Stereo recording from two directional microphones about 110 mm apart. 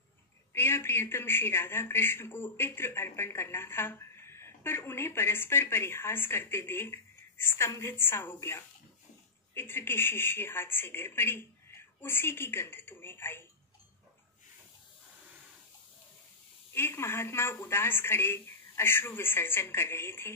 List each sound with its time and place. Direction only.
0.5 s a man's voice: 20° left (ahead or behind)
16.7 s a man's voice: 20° left (ahead or behind)